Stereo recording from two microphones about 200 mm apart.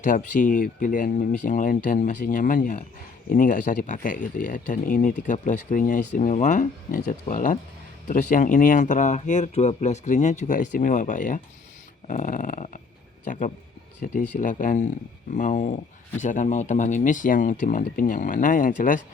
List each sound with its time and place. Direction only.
0.0 s speech: 40° left (ahead or behind)